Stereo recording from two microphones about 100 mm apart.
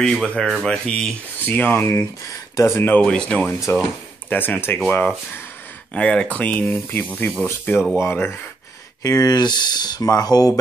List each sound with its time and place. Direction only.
0.0 s speech: centre (ahead or behind); by 3.0 s 25° left (ahead or behind)
3.0 s speech: 10° left (ahead or behind)
3.7 s speech: 25° left (ahead or behind)
9.0 s speech: 35° left (ahead or behind)